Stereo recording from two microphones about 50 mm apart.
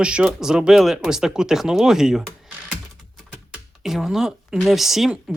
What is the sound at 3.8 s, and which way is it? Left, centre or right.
Speech, centre.